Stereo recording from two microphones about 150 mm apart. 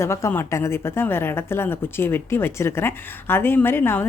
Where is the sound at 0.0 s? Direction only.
20° left (ahead or behind).